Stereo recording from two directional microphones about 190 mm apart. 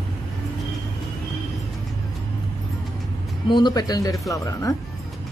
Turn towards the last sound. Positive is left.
turn(degrees=15)  # may be behind; listen again after turning